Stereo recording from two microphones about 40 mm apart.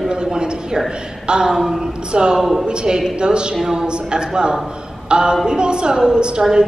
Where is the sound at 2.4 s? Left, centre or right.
Centre.